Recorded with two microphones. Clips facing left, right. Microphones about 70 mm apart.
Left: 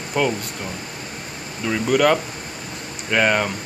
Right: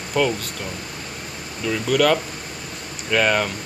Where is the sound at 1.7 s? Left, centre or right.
Centre.